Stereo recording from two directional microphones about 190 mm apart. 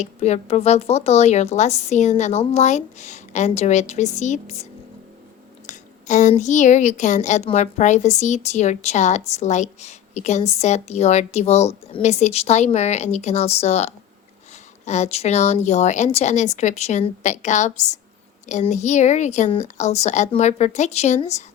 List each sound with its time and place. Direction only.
0.0 s speech: 35° left (ahead or behind)
5.6 s speech: 40° left (ahead or behind)